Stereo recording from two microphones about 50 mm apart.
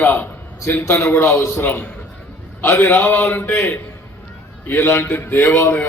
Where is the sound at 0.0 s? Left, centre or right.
Left.